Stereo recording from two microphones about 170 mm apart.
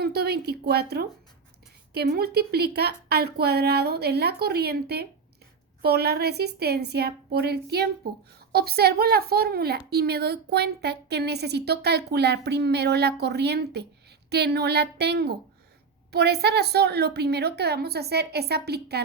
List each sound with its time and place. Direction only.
0.0 s a woman's voice: 70° right (ahead or behind)